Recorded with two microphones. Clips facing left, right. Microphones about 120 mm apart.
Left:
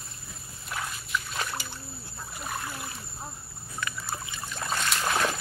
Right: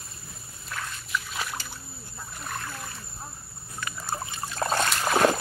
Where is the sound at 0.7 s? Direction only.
15° left (ahead or behind).